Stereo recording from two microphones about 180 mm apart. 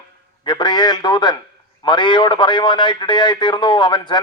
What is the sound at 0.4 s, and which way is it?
A man's voice, 25° left (ahead or behind).